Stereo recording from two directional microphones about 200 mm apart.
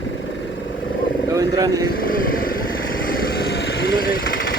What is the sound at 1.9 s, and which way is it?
Vehicle, 45° left (ahead or behind).